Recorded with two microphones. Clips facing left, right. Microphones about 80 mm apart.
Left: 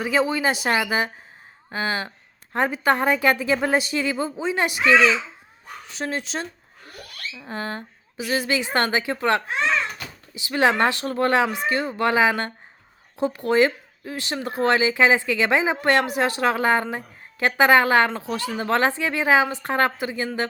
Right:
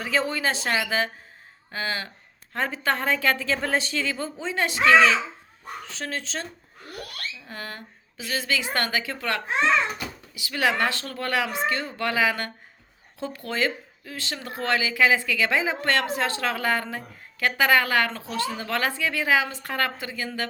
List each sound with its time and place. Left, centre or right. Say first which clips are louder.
0.0 s a woman's voice: left 4 dB; centre
7.3 s a woman's voice: left 7 dB; left